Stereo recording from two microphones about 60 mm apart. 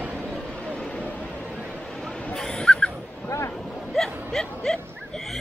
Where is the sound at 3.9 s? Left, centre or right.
Centre.